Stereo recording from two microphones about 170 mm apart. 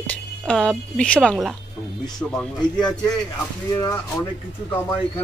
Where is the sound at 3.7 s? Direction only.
20° left (ahead or behind).